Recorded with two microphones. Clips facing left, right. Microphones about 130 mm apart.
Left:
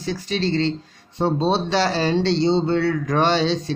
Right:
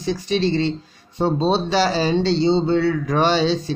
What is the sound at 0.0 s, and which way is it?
Speech, 15° right (ahead or behind).